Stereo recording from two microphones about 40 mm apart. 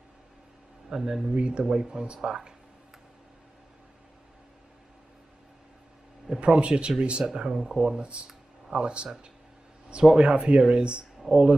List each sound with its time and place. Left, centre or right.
0.8 s speech: centre
1.3 s speech: right
6.4 s speech: right